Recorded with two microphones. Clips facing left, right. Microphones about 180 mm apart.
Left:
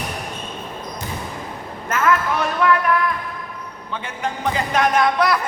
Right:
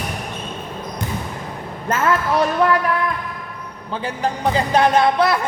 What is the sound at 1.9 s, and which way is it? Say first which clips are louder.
Speech: right 1 dB; 35° right (ahead or behind).